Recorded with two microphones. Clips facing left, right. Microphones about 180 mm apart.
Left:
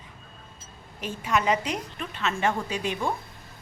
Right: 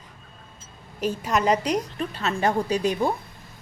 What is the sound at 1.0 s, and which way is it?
A woman's voice, 40° right (ahead or behind).